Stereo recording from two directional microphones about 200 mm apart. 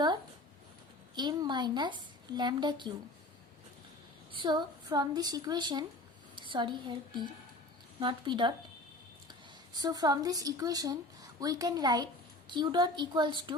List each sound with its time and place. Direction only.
1.1 s a woman's voice: 20° right (ahead or behind)
4.3 s a woman's voice: 20° right (ahead or behind)
9.7 s a woman's voice: 20° right (ahead or behind)